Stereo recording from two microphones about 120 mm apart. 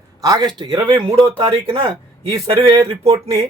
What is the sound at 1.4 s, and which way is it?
Speech, 50° right (ahead or behind).